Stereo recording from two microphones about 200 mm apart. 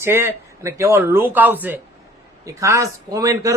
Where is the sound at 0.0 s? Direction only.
10° right (ahead or behind).